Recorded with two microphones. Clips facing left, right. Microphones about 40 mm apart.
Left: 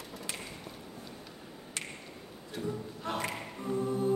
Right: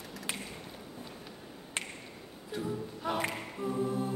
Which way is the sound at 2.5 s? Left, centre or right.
Centre.